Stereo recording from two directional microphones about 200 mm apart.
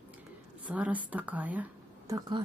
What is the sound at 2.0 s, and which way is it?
Speech, 15° right (ahead or behind).